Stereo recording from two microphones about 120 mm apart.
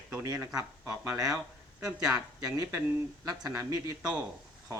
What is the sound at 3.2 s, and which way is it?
Speech, 35° right (ahead or behind).